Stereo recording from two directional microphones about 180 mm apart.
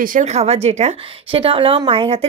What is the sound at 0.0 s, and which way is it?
A woman's voice, 45° right (ahead or behind).